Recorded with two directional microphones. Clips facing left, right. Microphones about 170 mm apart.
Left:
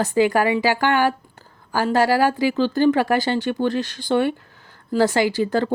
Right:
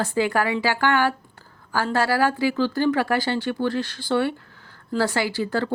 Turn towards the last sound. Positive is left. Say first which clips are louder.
# left 5 dB
turn(degrees=20)  # may be behind; listen again after turning